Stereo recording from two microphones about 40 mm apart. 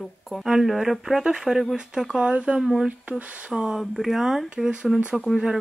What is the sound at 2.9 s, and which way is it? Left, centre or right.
Speech, right.